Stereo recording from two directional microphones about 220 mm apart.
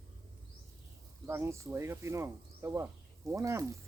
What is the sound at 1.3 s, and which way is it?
Speech, 10° right (ahead or behind).